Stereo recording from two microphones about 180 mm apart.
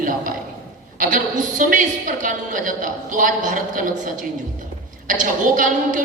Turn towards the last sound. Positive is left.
turn(degrees=-45)  # may be behind; listen again after turning